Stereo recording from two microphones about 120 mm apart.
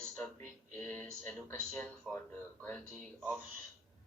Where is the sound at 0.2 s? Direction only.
20° left (ahead or behind).